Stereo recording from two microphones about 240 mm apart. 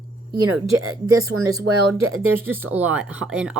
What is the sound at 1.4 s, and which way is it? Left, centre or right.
Speech, centre.